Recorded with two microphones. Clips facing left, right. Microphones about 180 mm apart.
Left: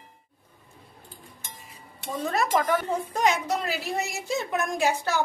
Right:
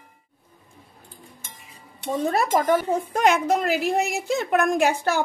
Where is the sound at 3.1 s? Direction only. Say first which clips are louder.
Right 5 dB; 55° right (ahead or behind).